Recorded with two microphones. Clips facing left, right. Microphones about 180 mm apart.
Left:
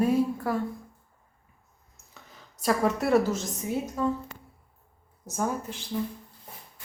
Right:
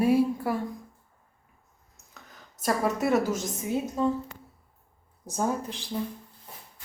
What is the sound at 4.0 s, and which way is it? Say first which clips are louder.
Speech: right 2 dB; 20° right (ahead or behind).